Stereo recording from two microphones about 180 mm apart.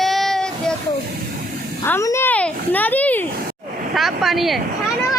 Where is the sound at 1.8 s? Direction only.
15° left (ahead or behind).